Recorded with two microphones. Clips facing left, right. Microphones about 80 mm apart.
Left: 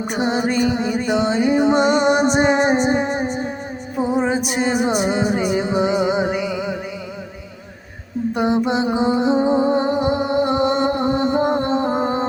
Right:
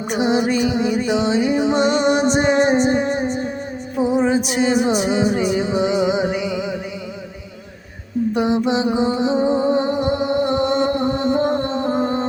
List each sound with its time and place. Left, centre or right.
0.1 s music: centre
8.4 s music: centre